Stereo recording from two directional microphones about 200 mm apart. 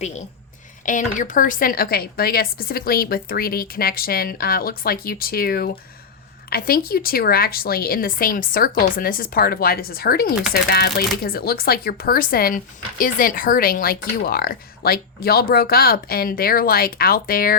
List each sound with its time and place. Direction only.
0.9 s speech: 40° left (ahead or behind)